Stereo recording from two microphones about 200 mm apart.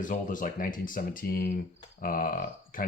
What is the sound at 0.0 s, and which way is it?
Speech, 40° left (ahead or behind).